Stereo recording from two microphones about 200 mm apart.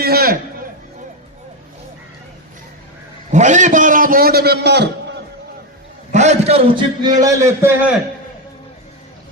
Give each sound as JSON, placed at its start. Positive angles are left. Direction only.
{"t": 0.0, "sound": "a sound", "side_deg": -50}
{"t": 3.3, "sound": "a man's voice", "side_deg": -35}
{"t": 6.1, "sound": "a man's voice", "side_deg": -35}